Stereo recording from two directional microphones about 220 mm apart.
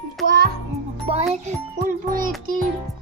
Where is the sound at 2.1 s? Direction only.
40° right (ahead or behind).